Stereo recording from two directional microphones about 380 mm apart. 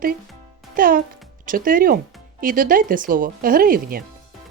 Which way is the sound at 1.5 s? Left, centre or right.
Right.